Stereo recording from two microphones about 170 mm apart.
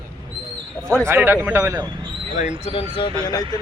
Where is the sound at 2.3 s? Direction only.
45° left (ahead or behind); by 3.4 s 25° left (ahead or behind).